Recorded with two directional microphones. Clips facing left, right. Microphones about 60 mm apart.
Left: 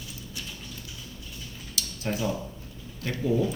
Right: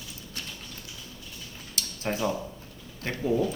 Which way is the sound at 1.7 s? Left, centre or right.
Right.